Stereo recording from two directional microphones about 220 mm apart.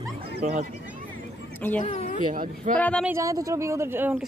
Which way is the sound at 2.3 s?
35° right (ahead or behind).